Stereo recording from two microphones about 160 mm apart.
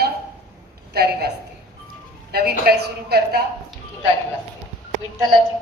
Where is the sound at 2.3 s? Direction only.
80° right.